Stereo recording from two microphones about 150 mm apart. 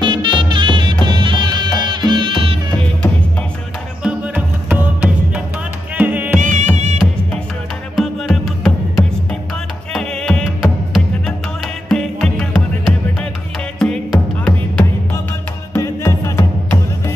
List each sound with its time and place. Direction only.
0.0 s music: 35° right (ahead or behind)
4.6 s music: 10° right (ahead or behind)
6.4 s music: 50° right (ahead or behind)
7.9 s music: centre (ahead or behind)
13.7 s music: 5° left (ahead or behind)
15.7 s music: 20° left (ahead or behind)